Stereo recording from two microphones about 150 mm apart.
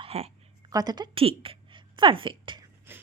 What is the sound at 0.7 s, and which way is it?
A woman's voice, 25° right (ahead or behind).